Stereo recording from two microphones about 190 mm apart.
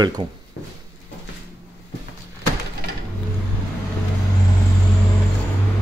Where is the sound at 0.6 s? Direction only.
75° left (ahead or behind).